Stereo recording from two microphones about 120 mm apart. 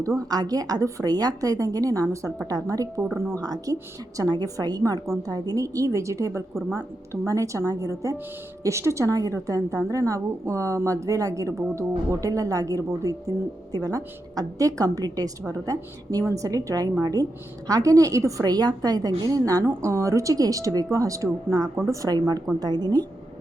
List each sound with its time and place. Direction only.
0.0 s a woman's voice: 30° right (ahead or behind)
6.5 s speech: centre (ahead or behind)
6.7 s a woman's voice: 25° right (ahead or behind)